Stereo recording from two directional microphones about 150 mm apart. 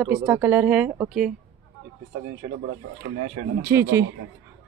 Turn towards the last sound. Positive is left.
turn(degrees=-20)  # may be behind; listen again after turning